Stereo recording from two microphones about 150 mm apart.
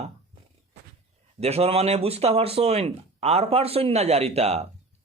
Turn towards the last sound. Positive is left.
turn(degrees=-45)  # may be behind; listen again after turning